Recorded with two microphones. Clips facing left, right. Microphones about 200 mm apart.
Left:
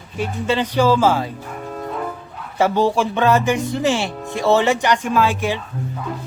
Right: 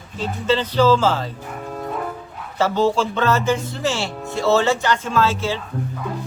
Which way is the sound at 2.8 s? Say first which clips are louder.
Left 1 dB; 15° left (ahead or behind).